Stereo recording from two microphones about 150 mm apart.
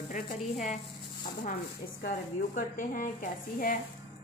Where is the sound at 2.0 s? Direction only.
85° left; by 3.8 s 65° left (ahead or behind).